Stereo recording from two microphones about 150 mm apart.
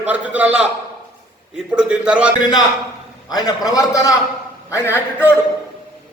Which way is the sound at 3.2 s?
25° left (ahead or behind).